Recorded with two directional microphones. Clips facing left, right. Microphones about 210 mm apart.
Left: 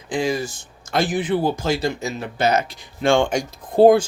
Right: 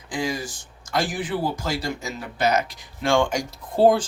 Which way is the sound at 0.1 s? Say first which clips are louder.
Left 5 dB; 25° left (ahead or behind).